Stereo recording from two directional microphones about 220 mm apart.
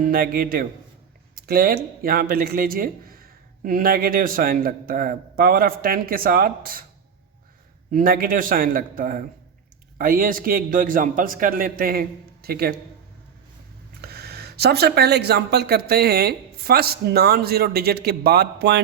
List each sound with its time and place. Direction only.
0.0 s speech: 40° right (ahead or behind)
7.9 s speech: 40° right (ahead or behind)
14.0 s speech: 45° right (ahead or behind)